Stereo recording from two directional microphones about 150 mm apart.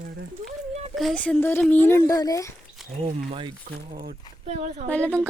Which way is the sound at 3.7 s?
75° right (ahead or behind).